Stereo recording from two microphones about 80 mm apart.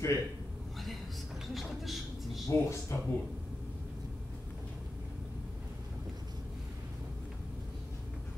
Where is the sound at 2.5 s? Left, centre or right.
Left.